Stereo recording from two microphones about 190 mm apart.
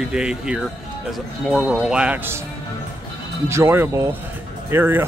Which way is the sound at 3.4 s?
15° right (ahead or behind).